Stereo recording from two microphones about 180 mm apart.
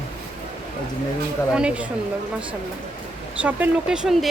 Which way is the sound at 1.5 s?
5° right (ahead or behind).